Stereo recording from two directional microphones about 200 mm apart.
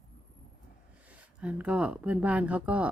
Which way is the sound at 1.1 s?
5° right (ahead or behind).